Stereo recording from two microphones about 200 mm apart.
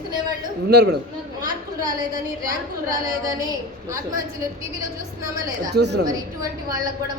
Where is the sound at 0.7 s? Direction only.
55° right (ahead or behind).